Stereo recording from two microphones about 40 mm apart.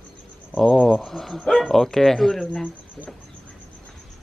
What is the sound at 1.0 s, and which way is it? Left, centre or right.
Speech, centre.